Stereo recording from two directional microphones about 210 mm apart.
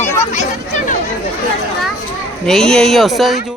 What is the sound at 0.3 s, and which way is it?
Chatter, 35° left (ahead or behind).